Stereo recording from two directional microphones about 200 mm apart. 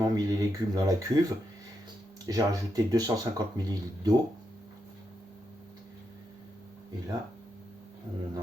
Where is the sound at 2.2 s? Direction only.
20° right (ahead or behind).